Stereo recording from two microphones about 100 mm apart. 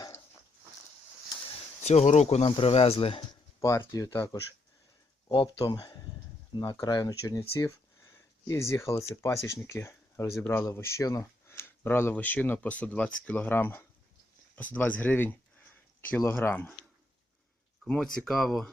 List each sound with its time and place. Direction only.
1.8 s speech: 90° left
2.6 s speech: 80° left
3.6 s speech: 30° left (ahead or behind)
5.6 s speech: 50° left (ahead or behind)
6.7 s speech: 40° left (ahead or behind); by 16.7 s 20° left (ahead or behind)
17.8 s speech: 5° left (ahead or behind)